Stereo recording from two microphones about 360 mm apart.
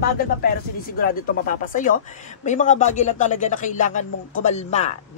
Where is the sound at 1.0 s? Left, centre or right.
Left.